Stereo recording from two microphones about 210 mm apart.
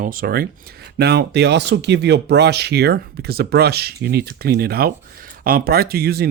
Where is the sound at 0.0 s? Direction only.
45° right (ahead or behind).